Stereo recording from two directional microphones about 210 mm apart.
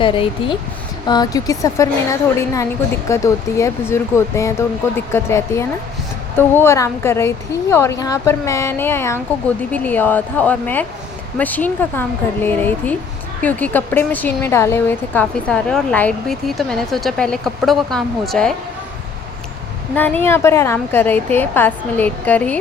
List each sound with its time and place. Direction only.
0.0 s a woman's voice: 25° left (ahead or behind); by 18.5 s 5° left (ahead or behind)
20.0 s a woman's voice: 10° left (ahead or behind)